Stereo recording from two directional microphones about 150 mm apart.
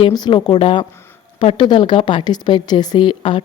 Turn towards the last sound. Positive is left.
turn(degrees=35)  # may be behind; listen again after turning